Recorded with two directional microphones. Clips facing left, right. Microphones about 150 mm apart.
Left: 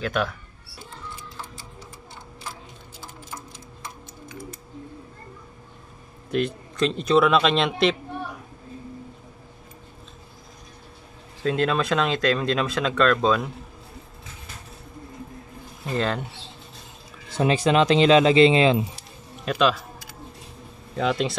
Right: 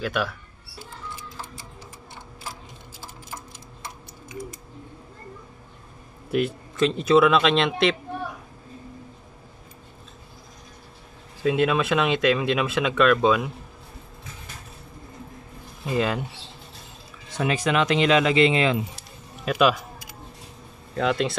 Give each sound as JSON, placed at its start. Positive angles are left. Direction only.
{"t": 0.0, "sound": "speech", "side_deg": -5}
{"t": 6.3, "sound": "speech", "side_deg": -5}
{"t": 11.4, "sound": "speech", "side_deg": -5}
{"t": 15.8, "sound": "speech", "side_deg": -10}
{"t": 17.4, "sound": "speech", "side_deg": 30}
{"t": 18.9, "sound": "music", "side_deg": -5}
{"t": 20.9, "sound": "speech", "side_deg": 0}